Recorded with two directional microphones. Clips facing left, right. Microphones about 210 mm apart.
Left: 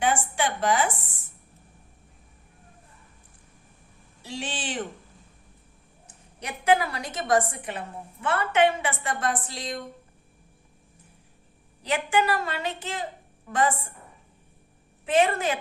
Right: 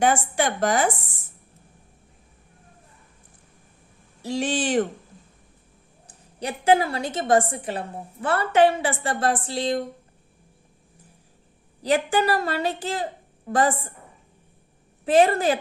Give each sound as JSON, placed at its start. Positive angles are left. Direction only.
{"t": 0.0, "sound": "a woman's voice", "side_deg": -45}
{"t": 4.2, "sound": "a woman's voice", "side_deg": -45}
{"t": 6.1, "sound": "a woman's voice", "side_deg": -30}
{"t": 11.8, "sound": "a woman's voice", "side_deg": -35}
{"t": 15.0, "sound": "a woman's voice", "side_deg": -35}